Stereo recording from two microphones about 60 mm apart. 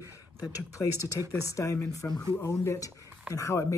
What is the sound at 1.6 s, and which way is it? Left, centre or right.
Speech, left.